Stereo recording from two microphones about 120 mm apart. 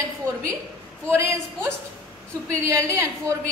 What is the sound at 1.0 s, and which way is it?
A woman's voice, 20° right (ahead or behind).